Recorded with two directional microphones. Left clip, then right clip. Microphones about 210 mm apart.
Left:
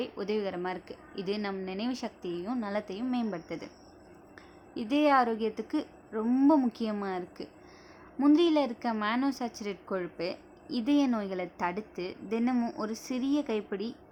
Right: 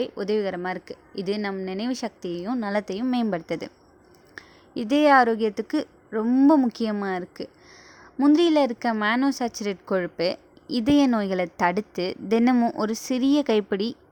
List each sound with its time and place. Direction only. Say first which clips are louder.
0.0 s a woman's voice: right 7 dB; 30° right (ahead or behind)